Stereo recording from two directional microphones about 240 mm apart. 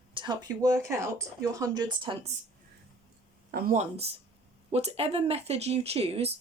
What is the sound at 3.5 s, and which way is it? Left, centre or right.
Speech, right.